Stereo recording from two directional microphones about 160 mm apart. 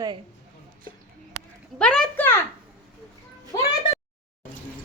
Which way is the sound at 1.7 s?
5° left (ahead or behind).